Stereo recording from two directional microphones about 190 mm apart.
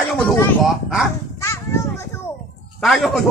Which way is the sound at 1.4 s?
15° left (ahead or behind).